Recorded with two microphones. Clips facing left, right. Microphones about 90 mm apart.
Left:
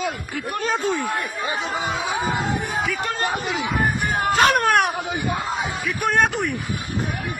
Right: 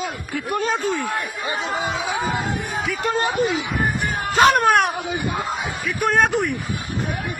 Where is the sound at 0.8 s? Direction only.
15° left (ahead or behind).